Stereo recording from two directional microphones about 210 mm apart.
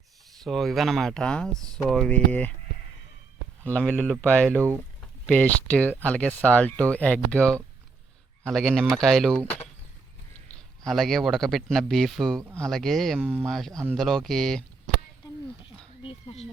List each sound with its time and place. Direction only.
0.4 s speech: centre (ahead or behind)
3.6 s speech: 5° left (ahead or behind)
4.5 s speech: 15° right (ahead or behind)
4.9 s speech: 5° left (ahead or behind)
10.8 s speech: centre (ahead or behind)
13.1 s speech: 10° right (ahead or behind)
13.4 s speech: centre (ahead or behind)
16.0 s speech: 30° left (ahead or behind)